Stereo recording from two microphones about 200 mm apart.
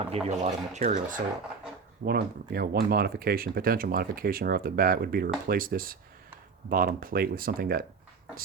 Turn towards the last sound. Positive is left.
turn(degrees=-45)  # may be behind; listen again after turning